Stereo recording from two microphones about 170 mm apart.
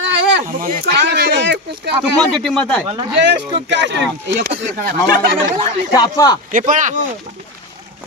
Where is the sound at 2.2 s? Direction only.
Centre (ahead or behind).